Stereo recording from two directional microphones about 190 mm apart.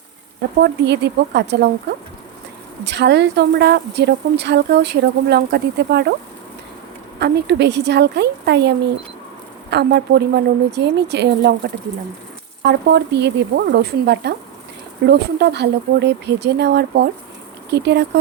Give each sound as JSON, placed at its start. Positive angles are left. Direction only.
{"t": 0.6, "sound": "speech", "side_deg": -60}
{"t": 2.8, "sound": "speech", "side_deg": -65}
{"t": 7.2, "sound": "speech", "side_deg": -60}
{"t": 12.6, "sound": "speech", "side_deg": -65}